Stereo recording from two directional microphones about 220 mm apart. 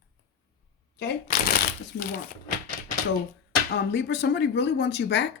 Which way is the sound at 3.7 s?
50° left (ahead or behind).